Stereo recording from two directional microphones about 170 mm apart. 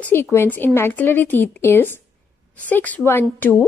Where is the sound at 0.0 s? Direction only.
15° left (ahead or behind).